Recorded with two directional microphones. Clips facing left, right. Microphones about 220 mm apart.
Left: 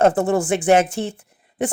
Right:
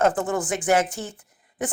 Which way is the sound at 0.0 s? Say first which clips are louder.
Left 5 dB; 25° left (ahead or behind).